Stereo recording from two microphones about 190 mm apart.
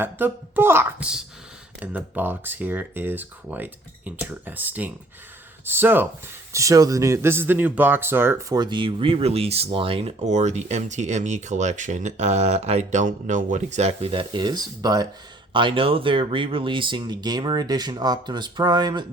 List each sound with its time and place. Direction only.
0.0 s speech: 10° right (ahead or behind)